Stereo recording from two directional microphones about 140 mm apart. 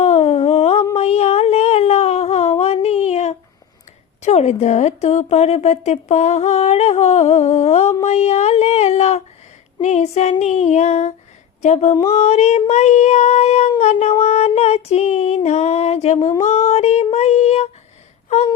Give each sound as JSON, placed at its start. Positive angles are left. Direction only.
{"t": 0.0, "sound": "humming", "side_deg": 45}
{"t": 0.9, "sound": "a sound", "side_deg": 45}
{"t": 4.2, "sound": "a woman's voice", "side_deg": 50}